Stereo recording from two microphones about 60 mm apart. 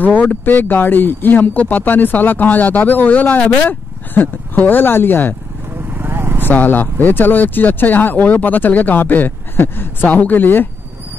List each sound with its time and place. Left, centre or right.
0.0 s speech: left
5.8 s vehicle: right
6.4 s speech: left